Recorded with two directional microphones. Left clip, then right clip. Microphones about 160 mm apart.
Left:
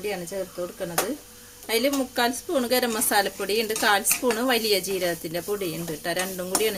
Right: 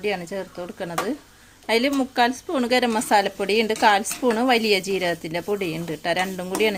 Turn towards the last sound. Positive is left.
turn(degrees=-55)  # may be behind; listen again after turning